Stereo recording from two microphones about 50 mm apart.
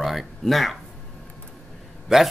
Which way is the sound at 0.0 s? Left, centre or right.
Centre.